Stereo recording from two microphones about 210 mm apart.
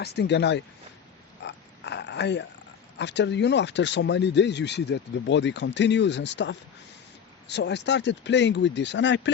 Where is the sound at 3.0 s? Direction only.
55° left (ahead or behind).